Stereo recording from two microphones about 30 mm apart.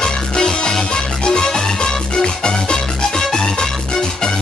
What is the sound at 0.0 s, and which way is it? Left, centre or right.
Music, left.